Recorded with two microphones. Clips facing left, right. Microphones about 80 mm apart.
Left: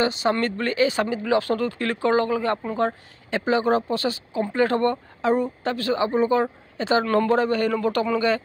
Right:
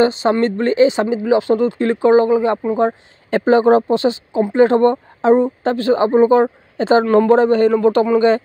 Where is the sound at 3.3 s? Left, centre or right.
Right.